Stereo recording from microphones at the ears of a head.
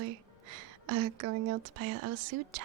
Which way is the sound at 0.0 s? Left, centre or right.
Right.